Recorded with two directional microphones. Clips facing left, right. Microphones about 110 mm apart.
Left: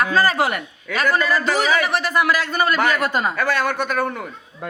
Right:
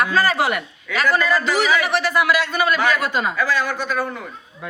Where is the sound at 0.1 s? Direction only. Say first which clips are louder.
Even; 40° left (ahead or behind).